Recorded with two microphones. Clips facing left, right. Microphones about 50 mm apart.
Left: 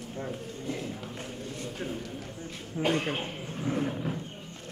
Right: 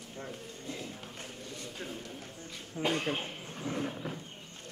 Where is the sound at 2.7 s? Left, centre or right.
Centre.